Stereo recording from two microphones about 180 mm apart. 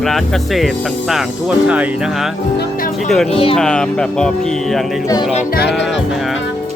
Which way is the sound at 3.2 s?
30° left (ahead or behind).